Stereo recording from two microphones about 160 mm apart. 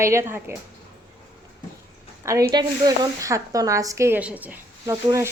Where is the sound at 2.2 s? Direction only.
20° right (ahead or behind).